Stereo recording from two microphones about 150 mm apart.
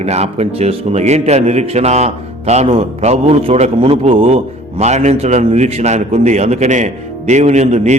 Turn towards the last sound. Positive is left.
turn(degrees=-50)  # may be behind; listen again after turning